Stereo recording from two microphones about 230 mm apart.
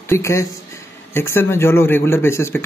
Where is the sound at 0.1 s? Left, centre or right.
Centre.